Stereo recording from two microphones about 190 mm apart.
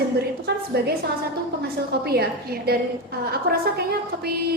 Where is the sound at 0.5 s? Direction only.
60° right (ahead or behind).